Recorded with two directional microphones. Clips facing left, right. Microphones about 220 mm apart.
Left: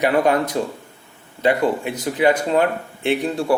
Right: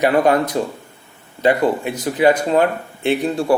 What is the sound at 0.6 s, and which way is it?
Speech, 40° right (ahead or behind).